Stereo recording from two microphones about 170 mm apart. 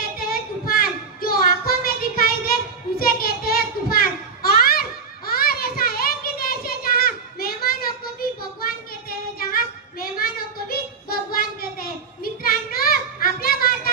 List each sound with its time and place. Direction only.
0.0 s a sound: 60° left (ahead or behind)
5.3 s children playing: 60° left (ahead or behind)
10.0 s child singing: 60° left (ahead or behind)